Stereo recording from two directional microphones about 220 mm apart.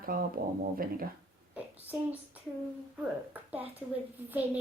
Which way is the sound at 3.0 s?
5° right (ahead or behind).